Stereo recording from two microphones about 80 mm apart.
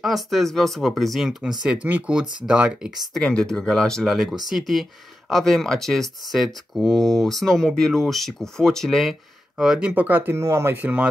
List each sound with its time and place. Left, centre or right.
0.0 s speech: centre
1.4 s speech: centre
3.2 s speech: centre
9.6 s speech: centre